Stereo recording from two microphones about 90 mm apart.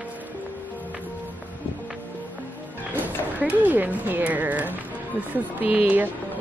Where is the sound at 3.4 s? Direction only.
20° right (ahead or behind).